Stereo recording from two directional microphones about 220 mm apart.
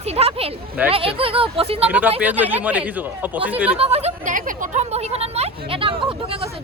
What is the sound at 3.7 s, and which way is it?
Speech, 25° right (ahead or behind).